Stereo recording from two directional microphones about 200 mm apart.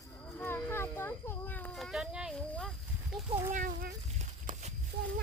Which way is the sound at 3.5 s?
45° right (ahead or behind).